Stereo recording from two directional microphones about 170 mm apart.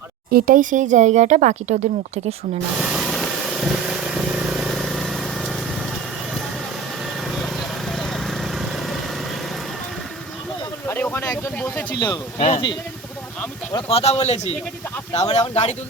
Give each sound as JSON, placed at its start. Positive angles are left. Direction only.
{"t": 0.3, "sound": "speech", "side_deg": -60}
{"t": 2.7, "sound": "vehicle", "side_deg": -5}
{"t": 7.3, "sound": "lawn mower", "side_deg": 0}
{"t": 10.8, "sound": "a sound", "side_deg": 15}
{"t": 11.9, "sound": "speech", "side_deg": 25}
{"t": 12.4, "sound": "a man's voice", "side_deg": 35}
{"t": 13.7, "sound": "a man's voice", "side_deg": 35}